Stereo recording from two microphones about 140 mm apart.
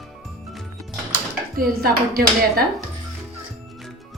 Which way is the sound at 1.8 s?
90° right.